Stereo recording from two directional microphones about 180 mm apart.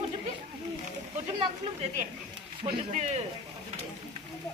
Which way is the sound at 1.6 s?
35° right (ahead or behind).